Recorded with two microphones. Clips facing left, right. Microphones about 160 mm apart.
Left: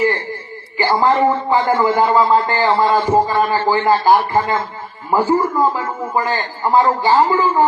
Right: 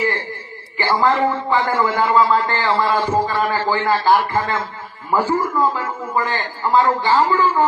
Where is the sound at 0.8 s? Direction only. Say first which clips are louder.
Left 3 dB; 20° left (ahead or behind).